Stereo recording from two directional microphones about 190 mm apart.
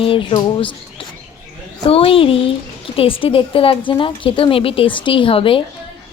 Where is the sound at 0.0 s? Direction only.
25° left (ahead or behind).